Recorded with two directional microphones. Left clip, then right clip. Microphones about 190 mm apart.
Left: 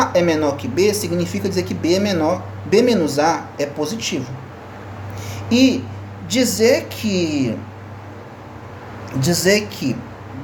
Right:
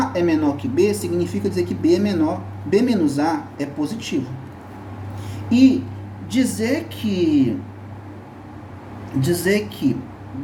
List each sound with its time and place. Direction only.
0.0 s speech: 50° left (ahead or behind)
5.5 s a woman's voice: 50° left (ahead or behind)
9.2 s a woman's voice: 60° left (ahead or behind)